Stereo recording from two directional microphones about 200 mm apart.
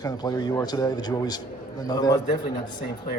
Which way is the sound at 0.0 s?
20° left (ahead or behind).